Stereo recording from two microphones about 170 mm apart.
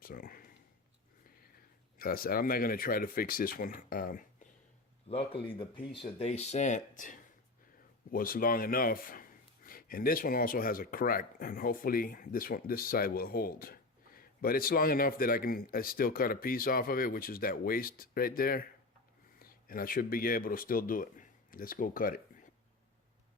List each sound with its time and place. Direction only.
0.0 s a sound: 60° left (ahead or behind)
2.0 s a man's voice: 60° left (ahead or behind)
5.0 s a man's voice: 35° left (ahead or behind); by 22.4 s 55° left (ahead or behind)